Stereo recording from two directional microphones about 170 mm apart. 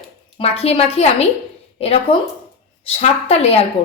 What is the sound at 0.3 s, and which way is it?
Speech, 35° left (ahead or behind).